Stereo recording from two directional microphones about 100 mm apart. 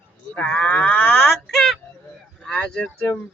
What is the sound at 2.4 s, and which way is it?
Livestock, 5° left (ahead or behind).